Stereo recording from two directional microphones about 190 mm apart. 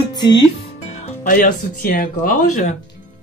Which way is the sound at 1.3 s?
50° left (ahead or behind).